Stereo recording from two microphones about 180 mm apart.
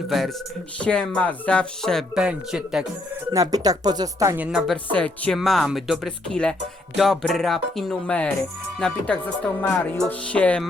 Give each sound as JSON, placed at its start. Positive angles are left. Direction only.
{"t": 0.1, "sound": "speech", "side_deg": 0}
{"t": 3.3, "sound": "speech", "side_deg": -20}
{"t": 4.4, "sound": "speech", "side_deg": 0}